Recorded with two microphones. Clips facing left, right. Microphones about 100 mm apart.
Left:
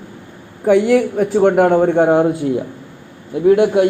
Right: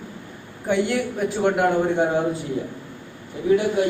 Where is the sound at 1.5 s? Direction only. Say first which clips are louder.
Left 8 dB; 70° left (ahead or behind).